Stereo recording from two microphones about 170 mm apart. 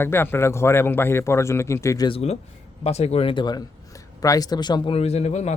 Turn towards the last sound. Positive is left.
turn(degrees=40)  # may be behind; listen again after turning